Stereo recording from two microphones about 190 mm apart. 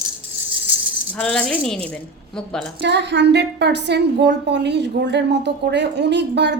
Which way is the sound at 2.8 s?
65° right (ahead or behind).